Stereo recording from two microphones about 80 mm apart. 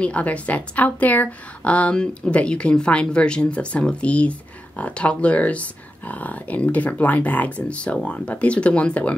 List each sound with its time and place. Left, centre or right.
0.0 s a woman's voice: centre